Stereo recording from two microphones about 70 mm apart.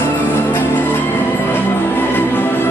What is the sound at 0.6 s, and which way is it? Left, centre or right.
Music, left.